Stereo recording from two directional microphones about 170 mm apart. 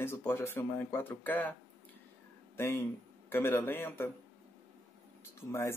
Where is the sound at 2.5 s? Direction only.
15° left (ahead or behind).